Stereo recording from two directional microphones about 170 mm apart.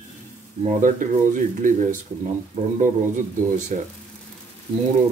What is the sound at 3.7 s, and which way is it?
Speech, 50° right (ahead or behind).